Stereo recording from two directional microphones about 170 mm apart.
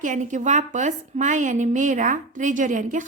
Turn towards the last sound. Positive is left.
turn(degrees=-45)  # may be behind; listen again after turning